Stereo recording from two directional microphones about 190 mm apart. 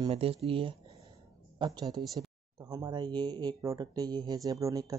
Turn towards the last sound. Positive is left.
turn(degrees=-20)  # may be behind; listen again after turning